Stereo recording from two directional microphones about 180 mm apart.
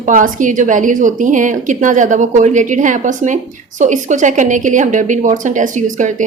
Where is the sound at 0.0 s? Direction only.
45° right (ahead or behind).